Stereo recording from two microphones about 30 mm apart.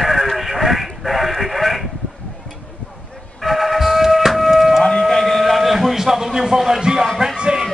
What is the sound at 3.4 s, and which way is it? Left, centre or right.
Music, centre.